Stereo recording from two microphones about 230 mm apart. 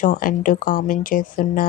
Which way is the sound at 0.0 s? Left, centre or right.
Left.